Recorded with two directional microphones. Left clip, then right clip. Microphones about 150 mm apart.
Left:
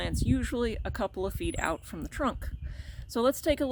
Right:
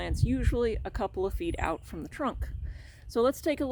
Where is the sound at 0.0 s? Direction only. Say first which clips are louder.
Left 1 dB; 15° left (ahead or behind).